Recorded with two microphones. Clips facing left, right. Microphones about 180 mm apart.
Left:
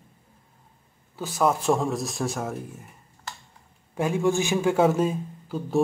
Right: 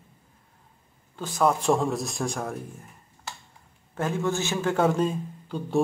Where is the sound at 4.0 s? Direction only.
15° left (ahead or behind).